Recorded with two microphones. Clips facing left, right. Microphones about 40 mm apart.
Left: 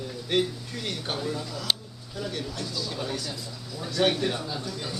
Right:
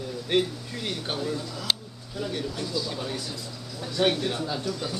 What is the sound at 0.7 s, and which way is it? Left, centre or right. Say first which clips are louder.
Speech: right 2 dB; centre.